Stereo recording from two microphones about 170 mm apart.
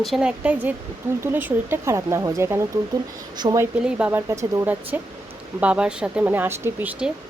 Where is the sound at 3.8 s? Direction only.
10° right (ahead or behind).